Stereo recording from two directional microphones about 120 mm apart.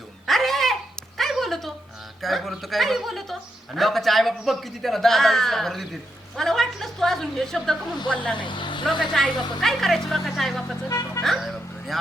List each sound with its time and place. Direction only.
0.3 s a sound: centre (ahead or behind)
2.2 s a man's voice: centre (ahead or behind)
8.4 s speech: 40° left (ahead or behind)
9.2 s a man's voice: 5° left (ahead or behind)
10.8 s speech: 25° left (ahead or behind)
11.2 s music: centre (ahead or behind)